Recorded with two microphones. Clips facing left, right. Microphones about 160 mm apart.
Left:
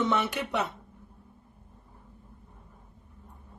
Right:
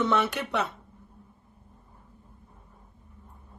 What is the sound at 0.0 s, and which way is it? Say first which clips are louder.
Speech: right 2 dB; 15° left (ahead or behind).